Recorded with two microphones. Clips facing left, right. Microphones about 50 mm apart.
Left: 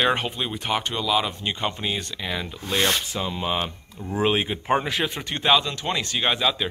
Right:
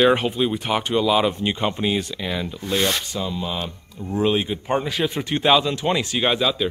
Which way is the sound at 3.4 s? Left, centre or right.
Left.